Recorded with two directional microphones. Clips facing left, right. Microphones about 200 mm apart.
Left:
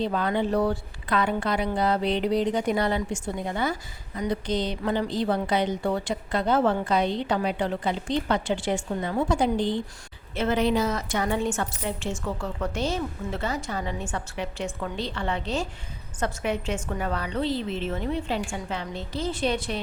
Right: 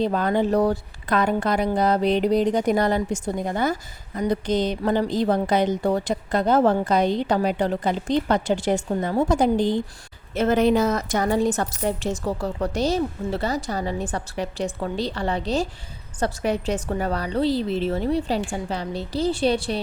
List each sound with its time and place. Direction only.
0.0 s a woman's voice: 45° right (ahead or behind)